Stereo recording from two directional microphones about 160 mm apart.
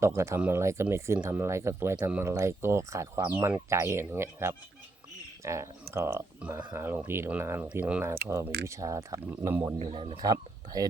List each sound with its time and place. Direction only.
0.0 s speech: 15° right (ahead or behind)
9.7 s speech: 35° right (ahead or behind)
10.2 s speech: 25° right (ahead or behind)